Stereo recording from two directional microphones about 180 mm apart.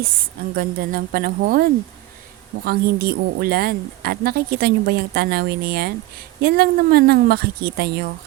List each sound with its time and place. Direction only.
0.5 s a woman's voice: 55° right (ahead or behind)